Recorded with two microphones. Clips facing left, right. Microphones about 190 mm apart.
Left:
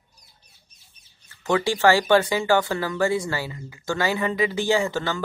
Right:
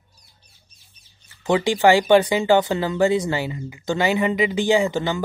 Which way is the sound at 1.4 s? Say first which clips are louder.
Right 3 dB; 15° right (ahead or behind).